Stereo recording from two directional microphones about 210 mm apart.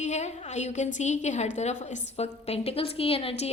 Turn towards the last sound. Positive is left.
turn(degrees=25)  # may be behind; listen again after turning